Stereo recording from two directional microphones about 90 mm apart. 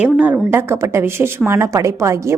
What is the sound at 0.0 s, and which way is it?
Speech, 15° right (ahead or behind).